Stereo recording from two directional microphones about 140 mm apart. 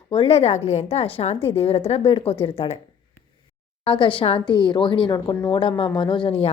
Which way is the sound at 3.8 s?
40° left (ahead or behind).